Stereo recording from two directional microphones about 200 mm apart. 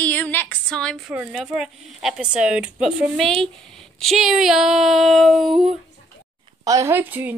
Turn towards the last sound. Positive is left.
turn(degrees=-10)  # may be behind; listen again after turning